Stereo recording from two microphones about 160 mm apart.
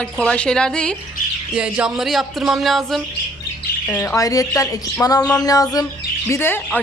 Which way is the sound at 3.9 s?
20° left (ahead or behind).